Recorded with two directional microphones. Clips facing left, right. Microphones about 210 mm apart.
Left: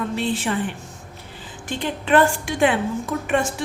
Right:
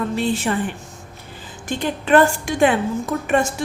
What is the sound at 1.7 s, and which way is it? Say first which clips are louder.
A woman's voice: right 3 dB; 45° right (ahead or behind).